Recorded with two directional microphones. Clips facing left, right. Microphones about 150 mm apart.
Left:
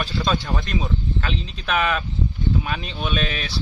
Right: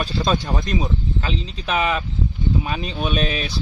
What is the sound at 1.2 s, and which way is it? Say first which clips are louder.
Speech: right 2 dB; 30° right (ahead or behind).